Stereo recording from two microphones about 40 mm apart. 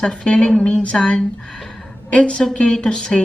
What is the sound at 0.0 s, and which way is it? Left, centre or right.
A woman's voice, left.